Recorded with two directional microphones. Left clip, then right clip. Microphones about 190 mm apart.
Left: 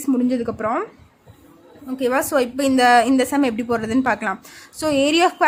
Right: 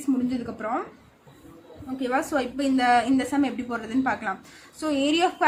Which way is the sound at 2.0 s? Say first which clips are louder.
Left 7 dB; 60° left (ahead or behind).